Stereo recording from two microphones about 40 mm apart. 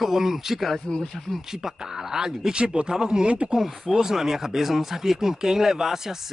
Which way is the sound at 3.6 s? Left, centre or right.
Centre.